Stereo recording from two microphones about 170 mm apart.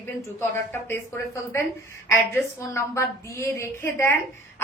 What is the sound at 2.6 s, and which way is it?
A woman's voice, 15° left (ahead or behind).